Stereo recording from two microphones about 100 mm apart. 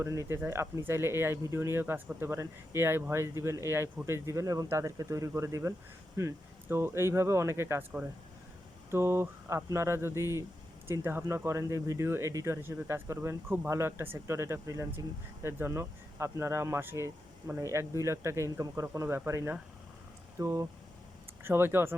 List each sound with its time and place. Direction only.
0.0 s speech: 30° right (ahead or behind)
8.9 s speech: 25° right (ahead or behind)